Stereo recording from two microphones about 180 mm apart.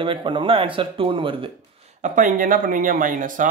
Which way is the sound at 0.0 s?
25° right (ahead or behind).